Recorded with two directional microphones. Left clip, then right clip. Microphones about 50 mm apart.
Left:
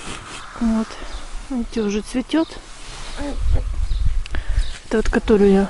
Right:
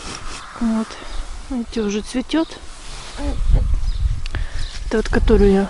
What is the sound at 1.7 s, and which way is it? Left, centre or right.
Speech, left.